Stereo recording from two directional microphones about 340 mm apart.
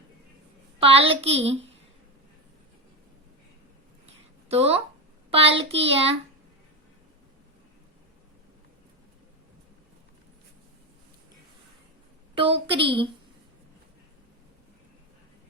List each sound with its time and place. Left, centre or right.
0.8 s a child's voice: centre
1.2 s child singing: centre
4.4 s speech: centre
5.3 s child singing: centre
12.4 s child singing: centre